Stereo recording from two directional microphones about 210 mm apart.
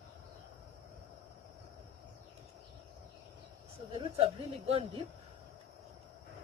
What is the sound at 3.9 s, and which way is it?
A woman's voice, 25° right (ahead or behind).